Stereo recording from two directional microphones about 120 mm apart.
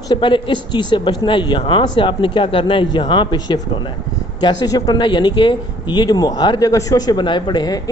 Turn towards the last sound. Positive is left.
turn(degrees=35)  # may be behind; listen again after turning